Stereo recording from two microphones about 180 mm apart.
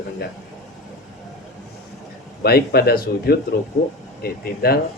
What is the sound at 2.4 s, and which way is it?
Speech, 60° left (ahead or behind).